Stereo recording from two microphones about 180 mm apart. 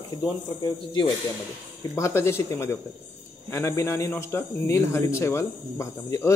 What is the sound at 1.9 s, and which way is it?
A man's voice, 15° left (ahead or behind).